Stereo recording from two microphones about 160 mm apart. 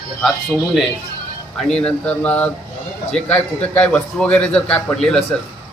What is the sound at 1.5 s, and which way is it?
A man's voice, 5° left (ahead or behind).